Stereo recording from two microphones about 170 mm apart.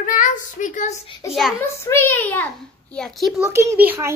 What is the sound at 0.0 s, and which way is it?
Child singing, 50° left (ahead or behind).